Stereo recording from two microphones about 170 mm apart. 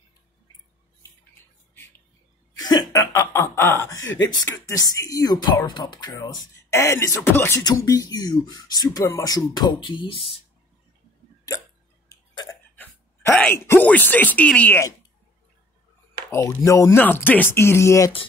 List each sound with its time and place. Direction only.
2.5 s speech: 25° left (ahead or behind)
12.1 s burping: 20° left (ahead or behind)
13.3 s speech: 10° left (ahead or behind)
16.3 s speech: 15° left (ahead or behind)